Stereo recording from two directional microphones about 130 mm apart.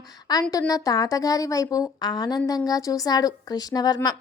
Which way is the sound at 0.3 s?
30° left (ahead or behind).